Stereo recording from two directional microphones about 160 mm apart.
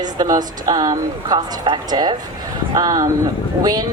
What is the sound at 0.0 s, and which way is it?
Speech, 25° right (ahead or behind).